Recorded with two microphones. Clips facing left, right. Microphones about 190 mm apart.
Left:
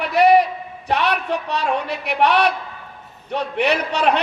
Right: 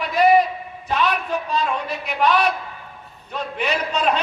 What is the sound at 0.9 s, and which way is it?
A woman's voice, 70° left (ahead or behind).